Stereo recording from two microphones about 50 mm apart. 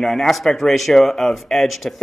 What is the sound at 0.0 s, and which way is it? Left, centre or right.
Speech, centre.